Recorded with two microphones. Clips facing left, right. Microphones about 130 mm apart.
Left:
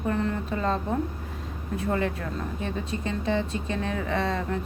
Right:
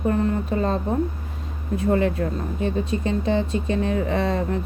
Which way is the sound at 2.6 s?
20° right (ahead or behind).